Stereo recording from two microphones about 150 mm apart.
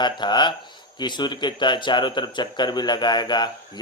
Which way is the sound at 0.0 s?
30° left (ahead or behind).